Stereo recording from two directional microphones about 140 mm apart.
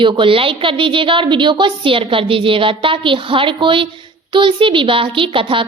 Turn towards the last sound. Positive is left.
turn(degrees=-40)  # may be behind; listen again after turning